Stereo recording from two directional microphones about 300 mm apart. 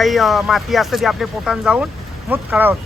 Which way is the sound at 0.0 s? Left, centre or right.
Centre.